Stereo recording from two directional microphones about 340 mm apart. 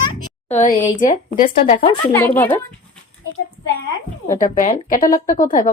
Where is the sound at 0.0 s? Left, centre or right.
Centre.